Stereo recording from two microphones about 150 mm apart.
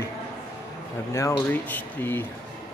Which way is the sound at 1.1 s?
20° left (ahead or behind).